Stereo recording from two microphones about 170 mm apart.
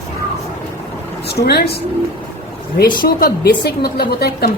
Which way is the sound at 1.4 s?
70° left (ahead or behind).